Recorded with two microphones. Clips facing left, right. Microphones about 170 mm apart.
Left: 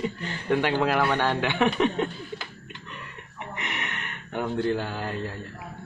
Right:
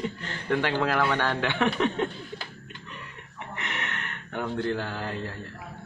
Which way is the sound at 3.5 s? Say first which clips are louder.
Even; 15° left (ahead or behind).